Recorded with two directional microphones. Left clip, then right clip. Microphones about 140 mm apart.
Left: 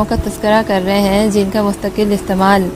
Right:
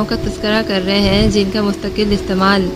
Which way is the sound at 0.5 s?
25° left (ahead or behind).